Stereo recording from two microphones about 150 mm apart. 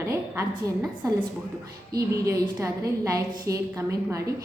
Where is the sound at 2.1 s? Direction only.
20° right (ahead or behind).